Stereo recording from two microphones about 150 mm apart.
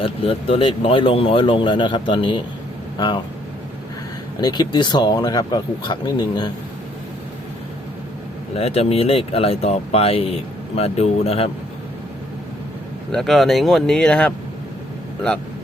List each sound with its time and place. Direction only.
0.0 s speech: 40° left (ahead or behind)
4.4 s speech: 25° left (ahead or behind)
8.5 s speech: 45° left (ahead or behind)
13.1 s speech: centre (ahead or behind)